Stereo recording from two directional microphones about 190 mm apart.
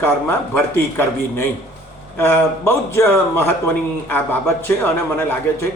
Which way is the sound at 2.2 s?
10° left (ahead or behind).